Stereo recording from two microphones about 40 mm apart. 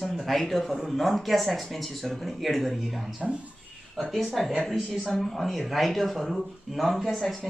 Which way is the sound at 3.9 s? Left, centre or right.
Centre.